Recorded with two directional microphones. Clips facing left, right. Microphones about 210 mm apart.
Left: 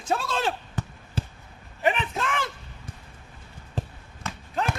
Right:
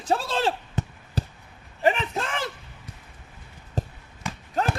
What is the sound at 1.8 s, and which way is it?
Speech, 35° right (ahead or behind).